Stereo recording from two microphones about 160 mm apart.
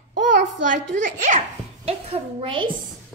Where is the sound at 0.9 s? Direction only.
50° right (ahead or behind).